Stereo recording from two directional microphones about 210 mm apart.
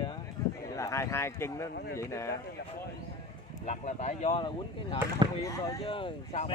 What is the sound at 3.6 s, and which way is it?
Speech, 30° left (ahead or behind).